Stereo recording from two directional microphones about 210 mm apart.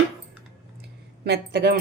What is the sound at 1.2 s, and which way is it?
Speech, 50° right (ahead or behind).